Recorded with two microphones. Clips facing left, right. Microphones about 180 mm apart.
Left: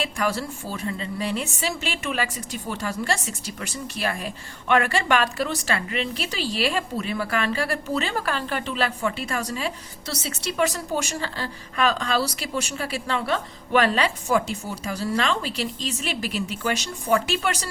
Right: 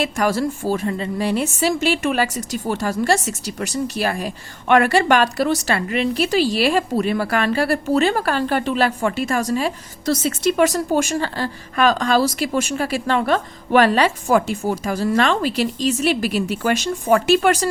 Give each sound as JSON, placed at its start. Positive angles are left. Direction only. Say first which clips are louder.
{"t": 0.2, "sound": "a woman's voice", "louder": "right 6 dB", "side_deg": -45}
{"t": 2.4, "sound": "speech", "louder": "right 7 dB", "side_deg": -90}
{"t": 2.6, "sound": "a woman's voice", "louder": "right 8 dB", "side_deg": -45}